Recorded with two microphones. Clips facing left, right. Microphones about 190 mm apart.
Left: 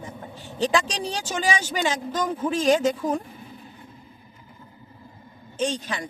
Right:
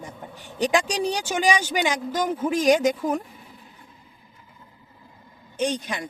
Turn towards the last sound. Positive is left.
turn(degrees=-15)  # may be behind; listen again after turning